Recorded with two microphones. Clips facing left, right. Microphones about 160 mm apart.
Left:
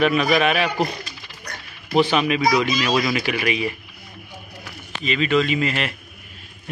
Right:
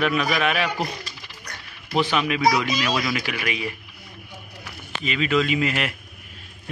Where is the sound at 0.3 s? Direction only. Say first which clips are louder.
Left 4 dB; 20° left (ahead or behind).